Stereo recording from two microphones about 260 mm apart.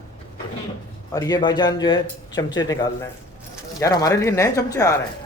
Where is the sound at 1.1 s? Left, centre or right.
Centre.